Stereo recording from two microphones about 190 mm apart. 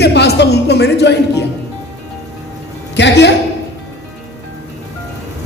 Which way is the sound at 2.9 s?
65° left (ahead or behind).